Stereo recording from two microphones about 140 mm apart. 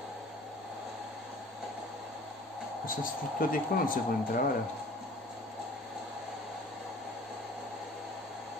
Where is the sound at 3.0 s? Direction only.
80° left.